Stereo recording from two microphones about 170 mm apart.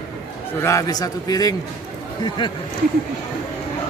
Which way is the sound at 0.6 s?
20° left (ahead or behind).